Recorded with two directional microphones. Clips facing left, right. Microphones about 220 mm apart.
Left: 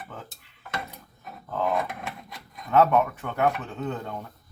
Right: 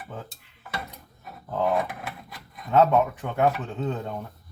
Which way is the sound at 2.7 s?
15° right (ahead or behind).